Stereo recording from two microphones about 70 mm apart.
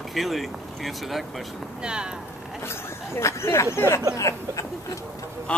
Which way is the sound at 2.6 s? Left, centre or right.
Left.